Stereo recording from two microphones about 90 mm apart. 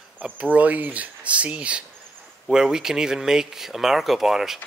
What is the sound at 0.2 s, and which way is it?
Speech, 15° right (ahead or behind).